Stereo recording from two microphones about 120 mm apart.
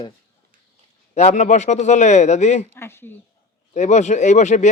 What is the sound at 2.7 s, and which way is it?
Speech, 20° left (ahead or behind).